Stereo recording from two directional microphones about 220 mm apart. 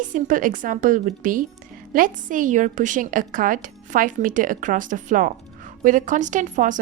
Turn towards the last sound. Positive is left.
turn(degrees=-35)  # may be behind; listen again after turning